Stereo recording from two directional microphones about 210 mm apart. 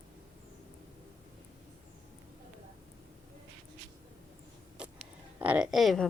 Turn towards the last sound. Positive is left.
turn(degrees=0)  # may be behind; listen again after turning